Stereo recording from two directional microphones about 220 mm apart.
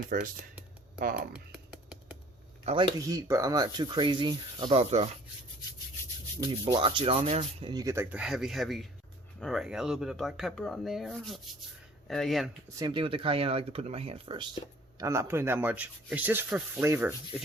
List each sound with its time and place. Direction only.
0.1 s speech: 40° right (ahead or behind)
1.3 s typing: centre (ahead or behind)
2.6 s speech: 20° right (ahead or behind)
6.4 s speech: 20° right (ahead or behind); by 12.5 s centre (ahead or behind)
12.6 s speech: 20° right (ahead or behind)
14.9 s speech: 15° right (ahead or behind)